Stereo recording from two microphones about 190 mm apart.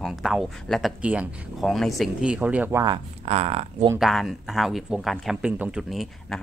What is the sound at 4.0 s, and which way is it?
Speech, centre (ahead or behind).